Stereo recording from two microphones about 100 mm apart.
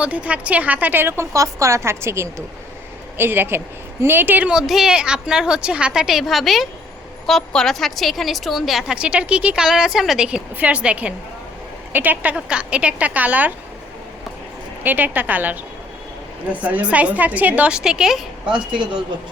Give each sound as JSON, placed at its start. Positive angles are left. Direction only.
{"t": 0.0, "sound": "a woman's voice", "side_deg": -15}
{"t": 14.8, "sound": "a woman's voice", "side_deg": -15}
{"t": 16.6, "sound": "a woman's voice", "side_deg": -15}